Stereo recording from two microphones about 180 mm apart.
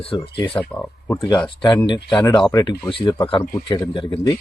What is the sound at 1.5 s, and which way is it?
Speech, 25° left (ahead or behind).